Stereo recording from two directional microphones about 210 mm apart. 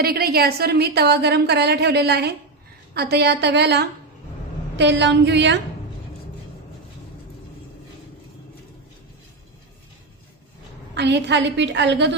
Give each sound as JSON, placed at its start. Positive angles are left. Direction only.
{"t": 0.0, "sound": "a woman's voice", "side_deg": -45}
{"t": 10.9, "sound": "a woman's voice", "side_deg": -55}